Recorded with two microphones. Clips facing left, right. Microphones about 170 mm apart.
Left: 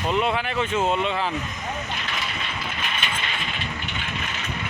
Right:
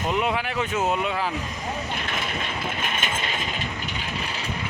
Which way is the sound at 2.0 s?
50° right (ahead or behind).